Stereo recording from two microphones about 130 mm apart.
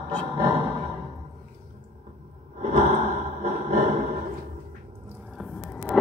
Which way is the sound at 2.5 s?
75° right (ahead or behind).